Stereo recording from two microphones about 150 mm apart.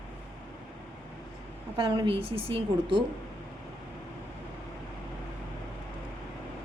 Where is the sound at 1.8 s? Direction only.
35° right (ahead or behind).